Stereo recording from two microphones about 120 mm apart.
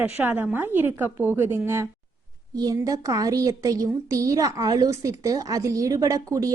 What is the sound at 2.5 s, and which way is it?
A woman's voice, 30° right (ahead or behind).